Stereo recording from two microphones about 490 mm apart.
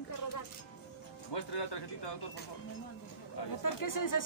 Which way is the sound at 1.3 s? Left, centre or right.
Left.